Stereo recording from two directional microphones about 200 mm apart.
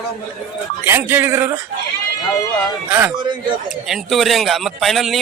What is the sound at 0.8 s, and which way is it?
Speech, 10° right (ahead or behind).